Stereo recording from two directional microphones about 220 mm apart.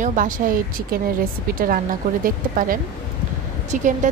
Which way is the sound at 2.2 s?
40° right (ahead or behind).